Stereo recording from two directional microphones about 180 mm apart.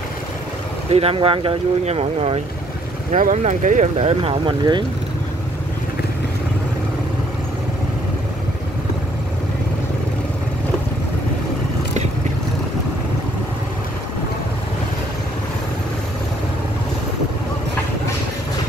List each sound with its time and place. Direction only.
0.8 s speech: 35° right (ahead or behind)
3.2 s speech: 45° right (ahead or behind); by 4.8 s 25° right (ahead or behind)